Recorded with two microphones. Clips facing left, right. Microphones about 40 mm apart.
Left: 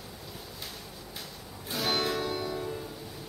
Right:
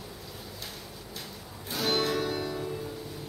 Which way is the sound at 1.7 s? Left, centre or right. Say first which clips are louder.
Right 2 dB; centre.